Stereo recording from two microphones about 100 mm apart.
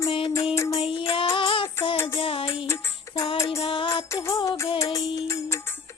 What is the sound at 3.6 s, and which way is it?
Music, 60° left (ahead or behind).